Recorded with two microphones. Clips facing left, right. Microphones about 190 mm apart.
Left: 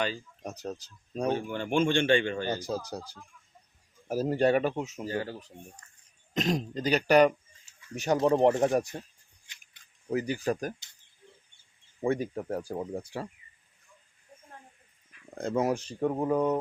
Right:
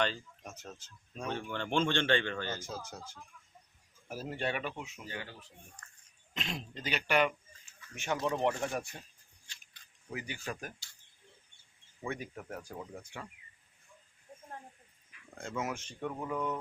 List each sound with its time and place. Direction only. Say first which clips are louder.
0.4 s speech: left 14 dB; 35° left (ahead or behind)
1.3 s speech: left 5 dB; 15° left (ahead or behind)
2.6 s speech: left 9 dB; 35° left (ahead or behind)
10.1 s speech: left 12 dB; 40° left (ahead or behind)
12.0 s speech: left 11 dB; 35° left (ahead or behind)
15.4 s speech: left 10 dB; 35° left (ahead or behind)